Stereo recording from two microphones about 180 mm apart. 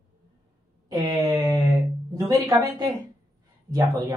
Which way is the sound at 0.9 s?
20° right (ahead or behind).